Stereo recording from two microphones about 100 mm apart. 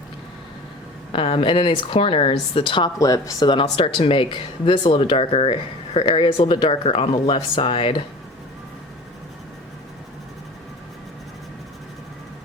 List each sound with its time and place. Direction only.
1.1 s speech: 60° left (ahead or behind)
3.0 s speech: 40° left (ahead or behind)
3.5 s speech: 60° left (ahead or behind)